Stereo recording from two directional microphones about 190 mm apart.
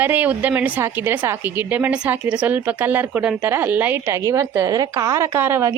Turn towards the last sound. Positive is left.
turn(degrees=-10)  # may be behind; listen again after turning